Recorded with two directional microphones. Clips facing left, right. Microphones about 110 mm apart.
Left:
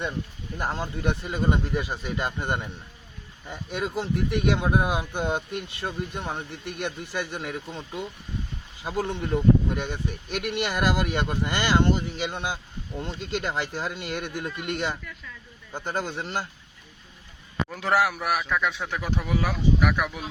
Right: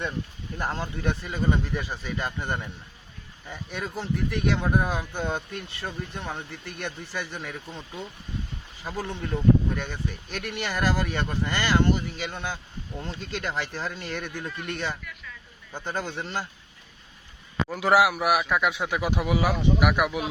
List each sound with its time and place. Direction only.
0.6 s speech: 10° left (ahead or behind)
17.7 s speech: 5° right (ahead or behind)